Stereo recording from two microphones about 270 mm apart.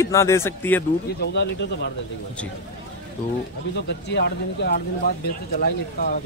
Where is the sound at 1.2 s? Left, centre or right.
Left.